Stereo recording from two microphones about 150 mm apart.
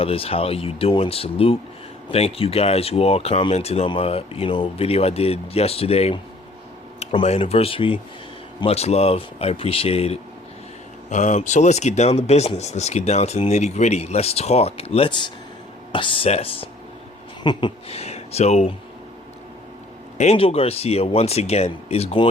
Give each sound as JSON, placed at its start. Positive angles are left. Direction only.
{"t": 0.0, "sound": "speech", "side_deg": 40}
{"t": 7.3, "sound": "speech", "side_deg": 40}
{"t": 11.1, "sound": "speech", "side_deg": 55}
{"t": 20.1, "sound": "speech", "side_deg": 45}